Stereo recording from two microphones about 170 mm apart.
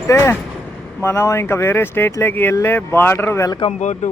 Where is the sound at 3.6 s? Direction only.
40° left (ahead or behind).